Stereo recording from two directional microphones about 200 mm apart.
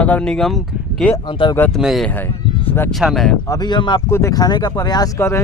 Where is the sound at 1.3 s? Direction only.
25° left (ahead or behind).